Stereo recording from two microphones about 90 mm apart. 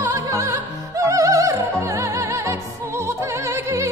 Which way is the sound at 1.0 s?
40° right (ahead or behind).